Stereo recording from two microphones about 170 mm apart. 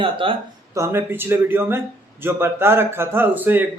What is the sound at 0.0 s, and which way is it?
Speech, 30° right (ahead or behind).